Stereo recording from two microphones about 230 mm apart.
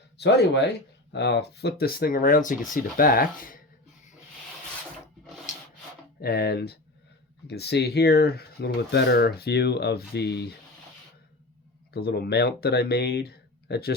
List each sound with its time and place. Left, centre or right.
0.2 s speech: left
6.2 s speech: left
11.9 s speech: left